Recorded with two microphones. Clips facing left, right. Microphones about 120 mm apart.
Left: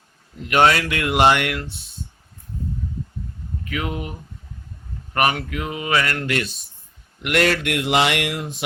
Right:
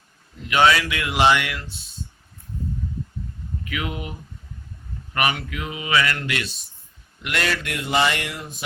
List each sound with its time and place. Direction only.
0.4 s speech: 50° left (ahead or behind)
3.6 s speech: 40° left (ahead or behind)
5.1 s speech: 45° left (ahead or behind)
7.2 s speech: 60° left (ahead or behind); by 8.5 s 80° left